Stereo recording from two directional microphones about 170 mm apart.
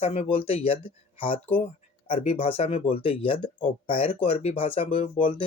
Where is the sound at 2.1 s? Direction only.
35° left (ahead or behind).